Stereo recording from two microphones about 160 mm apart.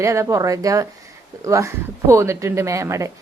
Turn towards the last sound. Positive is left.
turn(degrees=-20)  # may be behind; listen again after turning